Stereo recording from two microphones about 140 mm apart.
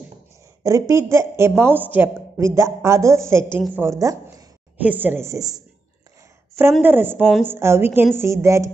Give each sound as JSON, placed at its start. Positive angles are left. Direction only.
{"t": 0.7, "sound": "a woman's voice", "side_deg": -20}
{"t": 4.7, "sound": "a woman's voice", "side_deg": -10}
{"t": 6.8, "sound": "a woman's voice", "side_deg": -15}